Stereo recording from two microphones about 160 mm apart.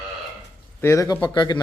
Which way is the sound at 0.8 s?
15° left (ahead or behind).